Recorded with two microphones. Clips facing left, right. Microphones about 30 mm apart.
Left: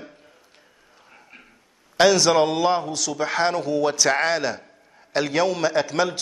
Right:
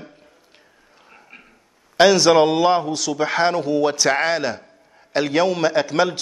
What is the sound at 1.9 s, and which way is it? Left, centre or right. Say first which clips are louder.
A man's voice: right 3 dB; centre.